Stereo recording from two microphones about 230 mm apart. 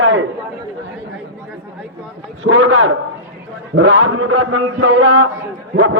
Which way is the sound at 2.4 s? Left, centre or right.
Right.